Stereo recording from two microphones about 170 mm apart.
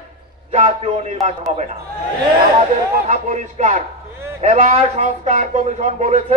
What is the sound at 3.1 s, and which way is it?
A man's voice, 40° right (ahead or behind).